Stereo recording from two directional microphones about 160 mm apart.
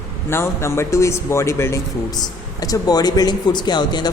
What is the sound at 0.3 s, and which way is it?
A man's voice, 15° left (ahead or behind).